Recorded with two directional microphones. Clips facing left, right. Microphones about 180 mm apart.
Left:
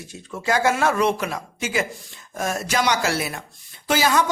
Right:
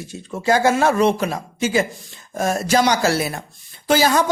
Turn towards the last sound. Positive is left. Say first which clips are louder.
# right 3 dB
turn(degrees=-35)  # may be behind; listen again after turning